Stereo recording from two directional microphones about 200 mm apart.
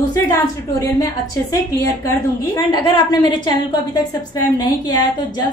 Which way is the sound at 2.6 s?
20° left (ahead or behind).